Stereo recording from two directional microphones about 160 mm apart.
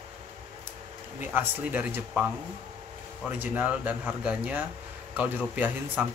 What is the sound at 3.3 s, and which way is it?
Speech, 10° right (ahead or behind).